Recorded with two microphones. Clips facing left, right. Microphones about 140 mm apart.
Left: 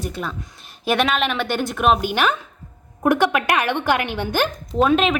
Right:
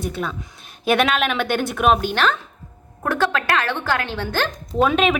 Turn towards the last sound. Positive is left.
turn(degrees=0)  # may be behind; listen again after turning